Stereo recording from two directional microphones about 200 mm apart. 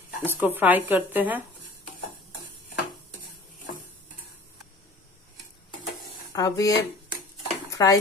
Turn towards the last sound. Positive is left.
turn(degrees=15)  # may be behind; listen again after turning